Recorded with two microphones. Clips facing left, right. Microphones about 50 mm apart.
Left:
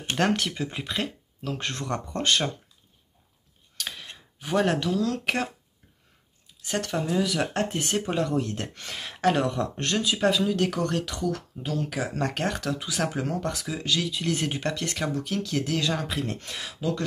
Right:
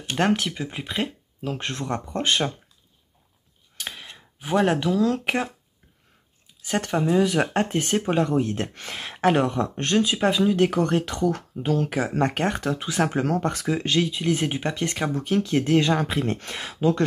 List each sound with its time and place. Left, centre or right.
0.1 s speech: centre
3.7 s a sound: centre
6.8 s speech: right
13.2 s speech: right
14.2 s speech: centre; by 17.0 s right